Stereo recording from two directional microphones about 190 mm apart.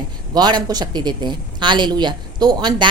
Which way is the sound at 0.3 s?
20° right (ahead or behind).